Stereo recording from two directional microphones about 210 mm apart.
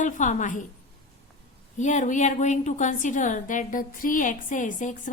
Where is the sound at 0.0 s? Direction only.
35° left (ahead or behind).